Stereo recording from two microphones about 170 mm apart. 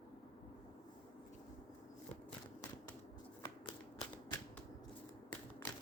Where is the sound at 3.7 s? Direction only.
30° left (ahead or behind).